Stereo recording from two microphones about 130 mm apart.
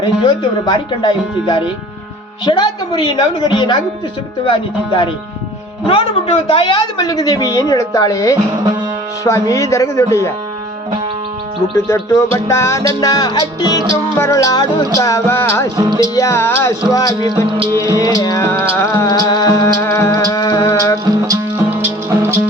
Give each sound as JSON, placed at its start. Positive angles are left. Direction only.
{"t": 0.0, "sound": "speech", "side_deg": 35}
{"t": 5.8, "sound": "music", "side_deg": 45}
{"t": 11.9, "sound": "music", "side_deg": 25}
{"t": 21.7, "sound": "music", "side_deg": -15}